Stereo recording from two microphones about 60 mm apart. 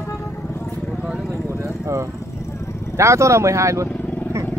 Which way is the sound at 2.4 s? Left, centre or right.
Left.